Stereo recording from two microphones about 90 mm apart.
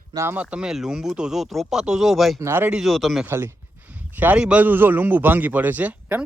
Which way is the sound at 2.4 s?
25° right (ahead or behind).